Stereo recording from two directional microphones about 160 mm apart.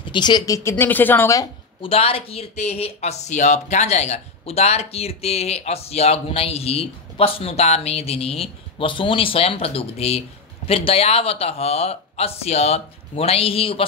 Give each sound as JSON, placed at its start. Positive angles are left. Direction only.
{"t": 0.1, "sound": "speech", "side_deg": 25}
{"t": 1.8, "sound": "speech", "side_deg": 35}